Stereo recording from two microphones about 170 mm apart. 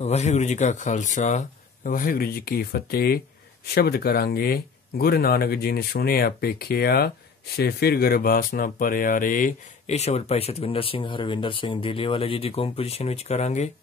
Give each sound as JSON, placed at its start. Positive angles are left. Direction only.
{"t": 0.0, "sound": "speech", "side_deg": 40}
{"t": 1.8, "sound": "speech", "side_deg": 55}